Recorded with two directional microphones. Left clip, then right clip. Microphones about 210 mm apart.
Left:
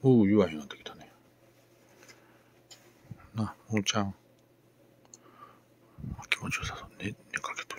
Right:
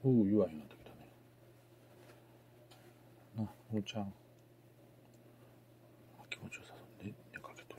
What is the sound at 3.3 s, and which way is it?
Speech, 20° left (ahead or behind).